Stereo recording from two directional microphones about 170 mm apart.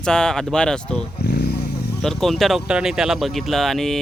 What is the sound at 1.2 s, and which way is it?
Vehicle, 75° left (ahead or behind).